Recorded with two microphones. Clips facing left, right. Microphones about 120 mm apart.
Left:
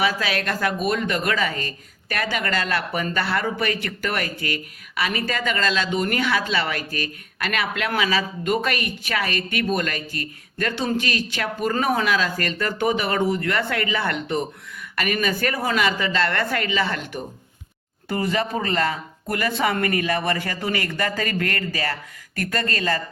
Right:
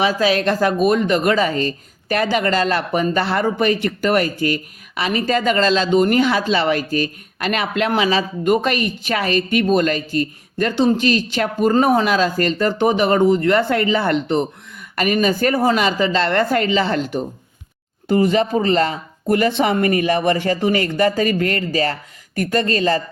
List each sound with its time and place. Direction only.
0.0 s speech: 25° right (ahead or behind)